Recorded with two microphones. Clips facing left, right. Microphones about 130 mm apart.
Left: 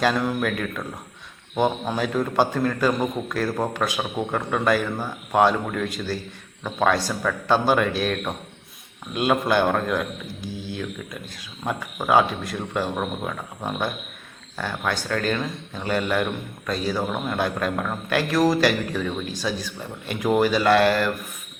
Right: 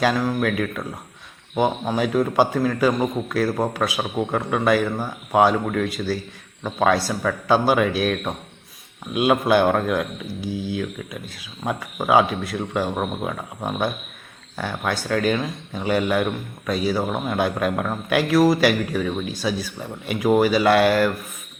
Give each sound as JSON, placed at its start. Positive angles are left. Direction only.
{"t": 0.0, "sound": "a man's voice", "side_deg": -5}